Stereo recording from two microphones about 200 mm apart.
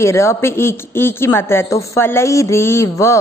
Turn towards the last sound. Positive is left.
turn(degrees=15)  # may be behind; listen again after turning